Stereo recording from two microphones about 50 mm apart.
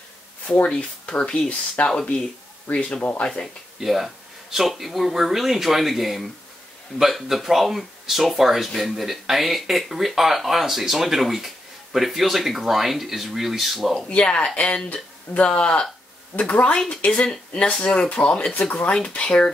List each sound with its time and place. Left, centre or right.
0.7 s speech: left
1.8 s speech: left
3.8 s speech: centre
14.0 s speech: left